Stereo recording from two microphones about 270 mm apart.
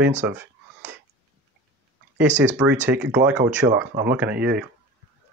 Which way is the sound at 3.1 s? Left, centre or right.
Centre.